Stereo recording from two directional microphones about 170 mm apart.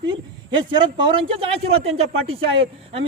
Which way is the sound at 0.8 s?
30° right (ahead or behind).